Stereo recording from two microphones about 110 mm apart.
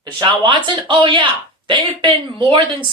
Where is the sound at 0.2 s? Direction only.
45° right (ahead or behind).